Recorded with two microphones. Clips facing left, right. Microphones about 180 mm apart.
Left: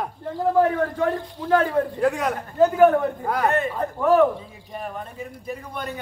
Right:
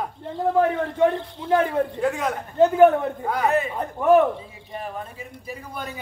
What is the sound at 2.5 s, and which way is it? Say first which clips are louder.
Speech: right 1 dB; 25° right (ahead or behind).